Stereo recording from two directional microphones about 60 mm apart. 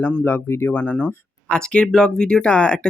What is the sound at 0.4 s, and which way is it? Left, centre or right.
Speech, left.